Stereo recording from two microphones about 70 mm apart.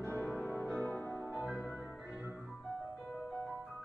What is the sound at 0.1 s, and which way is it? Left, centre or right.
Music, left.